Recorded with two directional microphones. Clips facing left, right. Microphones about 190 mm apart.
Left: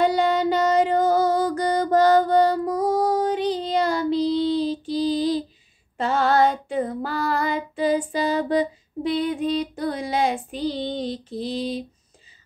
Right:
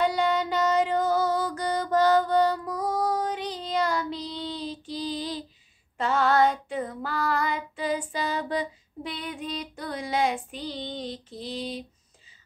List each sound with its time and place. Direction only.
0.0 s music: 35° left (ahead or behind)
5.9 s female singing: 30° left (ahead or behind)